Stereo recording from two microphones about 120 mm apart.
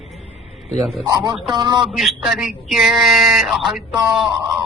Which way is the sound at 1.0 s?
35° right (ahead or behind).